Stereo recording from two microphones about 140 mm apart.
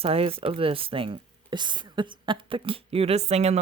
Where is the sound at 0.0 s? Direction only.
45° right (ahead or behind).